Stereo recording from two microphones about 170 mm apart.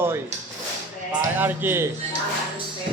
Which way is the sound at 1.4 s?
10° right (ahead or behind).